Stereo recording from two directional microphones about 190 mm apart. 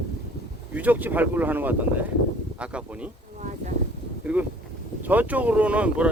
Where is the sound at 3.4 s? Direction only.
40° right (ahead or behind).